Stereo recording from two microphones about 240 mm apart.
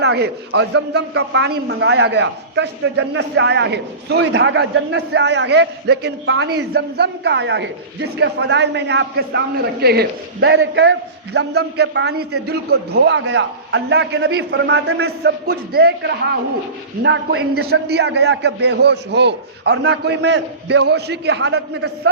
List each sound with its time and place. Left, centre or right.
0.0 s a man's voice: right